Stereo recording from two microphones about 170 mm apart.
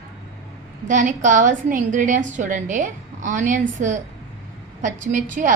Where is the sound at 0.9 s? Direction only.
45° right (ahead or behind).